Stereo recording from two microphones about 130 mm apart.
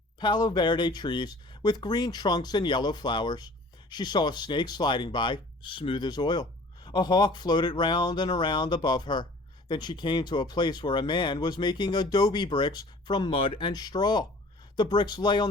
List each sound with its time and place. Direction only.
0.2 s speech: 35° left (ahead or behind)